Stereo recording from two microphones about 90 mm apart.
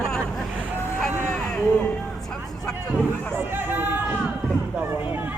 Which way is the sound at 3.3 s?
25° right (ahead or behind).